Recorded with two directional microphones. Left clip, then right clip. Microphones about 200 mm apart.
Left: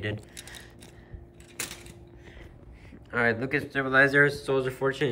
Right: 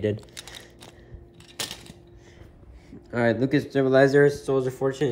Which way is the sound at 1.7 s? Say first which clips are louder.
Right 4 dB; centre (ahead or behind).